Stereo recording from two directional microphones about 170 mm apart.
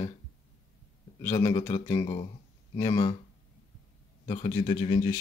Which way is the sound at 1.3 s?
15° left (ahead or behind).